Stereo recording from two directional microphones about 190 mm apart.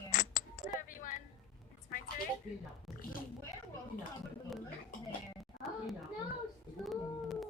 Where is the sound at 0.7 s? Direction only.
45° left (ahead or behind).